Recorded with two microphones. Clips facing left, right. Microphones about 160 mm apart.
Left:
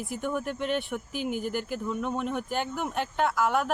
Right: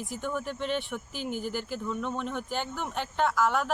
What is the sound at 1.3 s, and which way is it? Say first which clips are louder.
Speech: even; 50° left (ahead or behind).